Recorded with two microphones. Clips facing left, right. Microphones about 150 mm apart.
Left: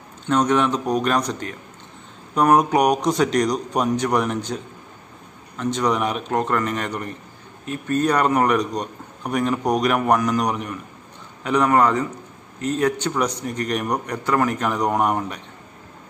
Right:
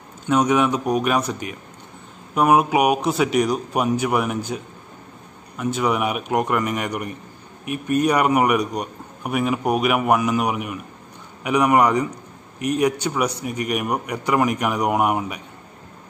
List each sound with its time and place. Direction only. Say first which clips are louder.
0.3 s a man's voice: right 1 dB; 10° right (ahead or behind)
5.6 s a man's voice: even; 10° right (ahead or behind)